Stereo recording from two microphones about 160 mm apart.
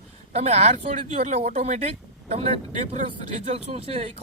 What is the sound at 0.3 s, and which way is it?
Speech, 40° right (ahead or behind).